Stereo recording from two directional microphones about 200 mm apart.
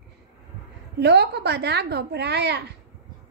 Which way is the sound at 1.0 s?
55° right (ahead or behind).